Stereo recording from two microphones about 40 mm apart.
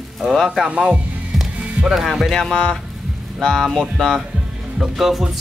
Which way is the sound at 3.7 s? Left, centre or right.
Centre.